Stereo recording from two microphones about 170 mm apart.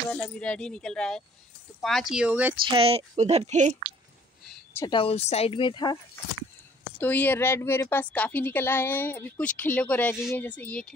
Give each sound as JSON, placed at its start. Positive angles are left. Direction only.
{"t": 0.1, "sound": "speech", "side_deg": 5}
{"t": 2.6, "sound": "speech", "side_deg": -30}
{"t": 4.7, "sound": "speech", "side_deg": 25}
{"t": 7.0, "sound": "a woman's voice", "side_deg": 10}